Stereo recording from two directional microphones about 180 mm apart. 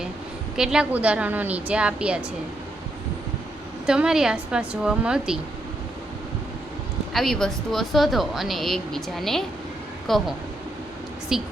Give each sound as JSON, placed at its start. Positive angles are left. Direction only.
{"t": 0.5, "sound": "a woman's voice", "side_deg": -5}
{"t": 3.8, "sound": "speech", "side_deg": -5}
{"t": 7.1, "sound": "speech", "side_deg": 0}